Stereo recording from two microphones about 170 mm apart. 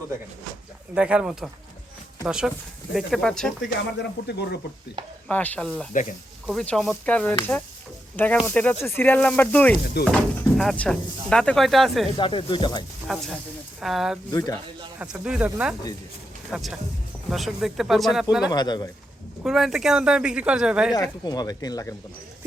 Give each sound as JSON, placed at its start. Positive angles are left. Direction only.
{"t": 0.9, "sound": "speech", "side_deg": -5}
{"t": 4.3, "sound": "speech", "side_deg": 75}
{"t": 5.3, "sound": "speech", "side_deg": 10}
{"t": 5.9, "sound": "speech", "side_deg": 50}
{"t": 6.5, "sound": "speech", "side_deg": 0}
{"t": 10.0, "sound": "speech", "side_deg": 70}
{"t": 10.6, "sound": "speech", "side_deg": 0}
{"t": 12.1, "sound": "speech", "side_deg": 30}
{"t": 13.1, "sound": "speech", "side_deg": 0}
{"t": 14.3, "sound": "speech", "side_deg": 20}
{"t": 14.9, "sound": "speech", "side_deg": -5}
{"t": 18.5, "sound": "speech", "side_deg": 25}
{"t": 19.4, "sound": "speech", "side_deg": -5}
{"t": 20.9, "sound": "speech", "side_deg": 25}